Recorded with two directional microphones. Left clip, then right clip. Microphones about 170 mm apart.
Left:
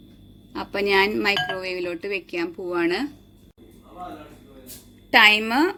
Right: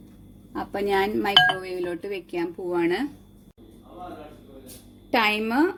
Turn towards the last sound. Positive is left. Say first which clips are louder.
# left 6 dB
turn(degrees=0)  # may be behind; listen again after turning